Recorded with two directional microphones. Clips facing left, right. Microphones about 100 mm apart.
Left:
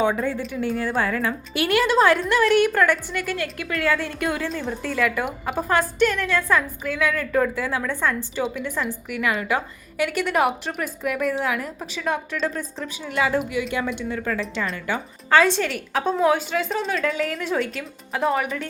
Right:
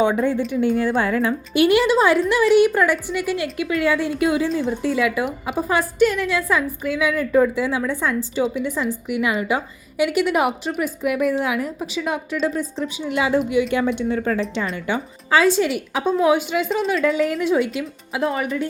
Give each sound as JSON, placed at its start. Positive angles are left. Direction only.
{"t": 0.0, "sound": "a woman's voice", "side_deg": -25}
{"t": 4.8, "sound": "a woman's voice", "side_deg": -10}
{"t": 9.0, "sound": "a woman's voice", "side_deg": -20}
{"t": 13.7, "sound": "a woman's voice", "side_deg": -30}
{"t": 14.8, "sound": "a woman's voice", "side_deg": -10}
{"t": 17.0, "sound": "a woman's voice", "side_deg": -15}
{"t": 18.2, "sound": "speech", "side_deg": 0}